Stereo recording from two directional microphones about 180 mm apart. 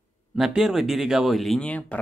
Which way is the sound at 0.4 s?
5° right (ahead or behind).